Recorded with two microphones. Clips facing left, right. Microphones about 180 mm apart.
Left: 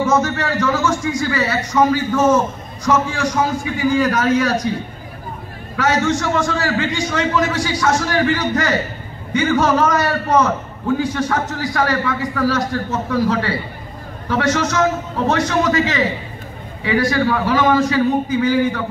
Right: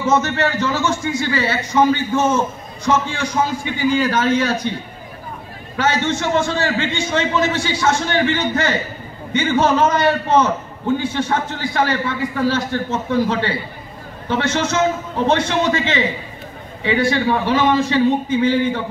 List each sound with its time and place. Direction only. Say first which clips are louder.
0.1 s a man's voice: even; 25° right (ahead or behind)
5.8 s a man's voice: left 2 dB; 25° right (ahead or behind)